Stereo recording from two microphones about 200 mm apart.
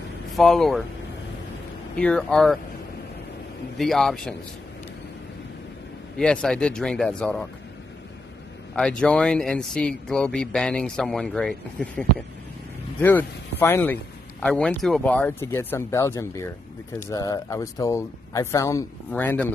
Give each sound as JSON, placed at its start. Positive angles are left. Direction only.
{"t": 0.4, "sound": "speech", "side_deg": 0}
{"t": 2.0, "sound": "speech", "side_deg": 5}
{"t": 3.7, "sound": "speech", "side_deg": 0}
{"t": 6.1, "sound": "speech", "side_deg": 5}
{"t": 8.7, "sound": "speech", "side_deg": 5}